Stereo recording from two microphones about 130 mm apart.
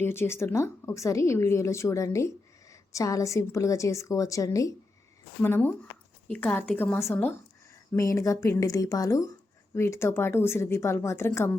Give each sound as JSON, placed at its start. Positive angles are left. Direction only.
{"t": 0.0, "sound": "a woman's voice", "side_deg": 20}